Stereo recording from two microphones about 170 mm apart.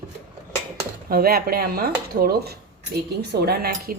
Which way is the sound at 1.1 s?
60° right (ahead or behind).